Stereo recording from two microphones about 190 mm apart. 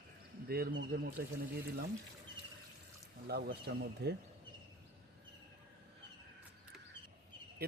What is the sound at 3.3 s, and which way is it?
Speech, 55° right (ahead or behind).